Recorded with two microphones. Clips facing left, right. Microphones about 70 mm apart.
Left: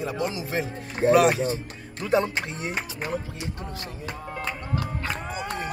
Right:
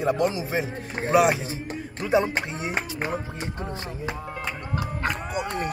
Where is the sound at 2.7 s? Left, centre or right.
Right.